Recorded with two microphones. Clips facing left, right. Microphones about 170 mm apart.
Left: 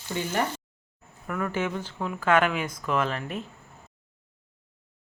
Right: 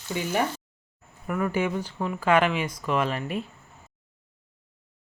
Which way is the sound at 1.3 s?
10° right (ahead or behind).